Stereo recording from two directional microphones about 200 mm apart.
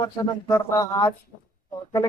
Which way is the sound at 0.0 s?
15° left (ahead or behind).